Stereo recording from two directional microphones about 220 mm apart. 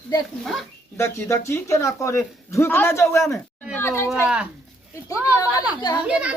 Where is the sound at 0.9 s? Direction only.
10° left (ahead or behind).